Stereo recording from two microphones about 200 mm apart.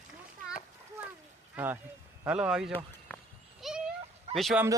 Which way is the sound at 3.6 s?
Centre (ahead or behind).